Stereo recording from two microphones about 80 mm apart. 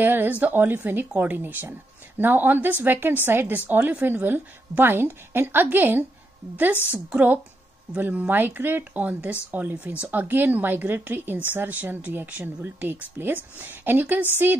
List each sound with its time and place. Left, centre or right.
0.0 s speech: right